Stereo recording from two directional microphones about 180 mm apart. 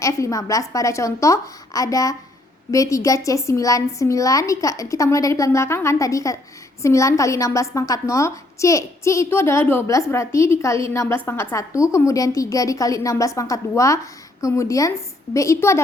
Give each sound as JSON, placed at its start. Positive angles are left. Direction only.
{"t": 0.0, "sound": "a woman's voice", "side_deg": 20}